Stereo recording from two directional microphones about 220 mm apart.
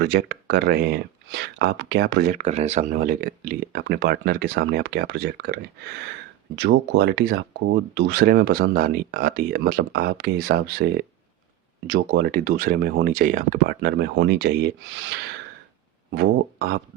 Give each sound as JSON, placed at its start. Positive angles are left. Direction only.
{"t": 0.0, "sound": "speech", "side_deg": -50}
{"t": 11.9, "sound": "speech", "side_deg": -45}
{"t": 16.1, "sound": "speech", "side_deg": -45}